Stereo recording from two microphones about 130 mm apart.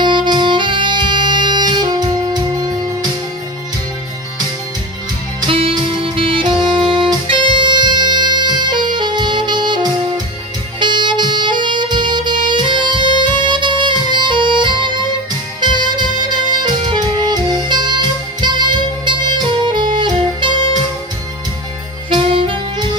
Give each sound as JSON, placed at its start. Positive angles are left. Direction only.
{"t": 0.0, "sound": "saxophone", "side_deg": -35}
{"t": 5.4, "sound": "music", "side_deg": -45}
{"t": 10.8, "sound": "saxophone", "side_deg": -35}
{"t": 15.6, "sound": "music", "side_deg": -35}
{"t": 22.1, "sound": "saxophone", "side_deg": -40}